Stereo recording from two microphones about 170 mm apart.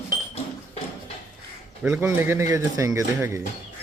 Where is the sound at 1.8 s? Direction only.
10° right (ahead or behind).